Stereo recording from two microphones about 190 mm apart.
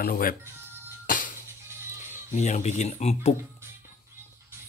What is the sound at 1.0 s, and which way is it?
Music, 45° left (ahead or behind).